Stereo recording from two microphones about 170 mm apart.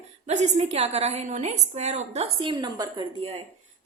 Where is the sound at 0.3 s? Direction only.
40° right (ahead or behind); by 3.1 s 20° right (ahead or behind).